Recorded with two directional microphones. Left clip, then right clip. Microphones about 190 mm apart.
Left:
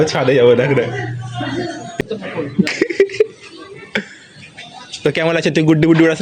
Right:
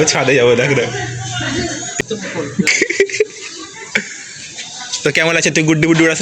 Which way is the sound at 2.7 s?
25° left (ahead or behind).